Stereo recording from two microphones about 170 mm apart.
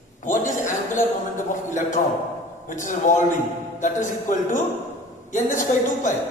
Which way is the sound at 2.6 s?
50° left (ahead or behind).